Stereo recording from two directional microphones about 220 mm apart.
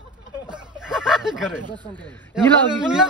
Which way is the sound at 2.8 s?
5° right (ahead or behind).